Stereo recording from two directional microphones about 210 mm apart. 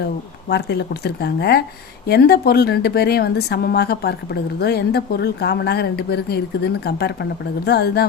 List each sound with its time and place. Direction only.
0.4 s a woman's voice: 55° left (ahead or behind)